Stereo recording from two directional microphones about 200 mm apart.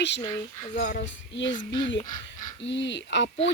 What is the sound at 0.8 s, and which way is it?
Music, 45° left (ahead or behind).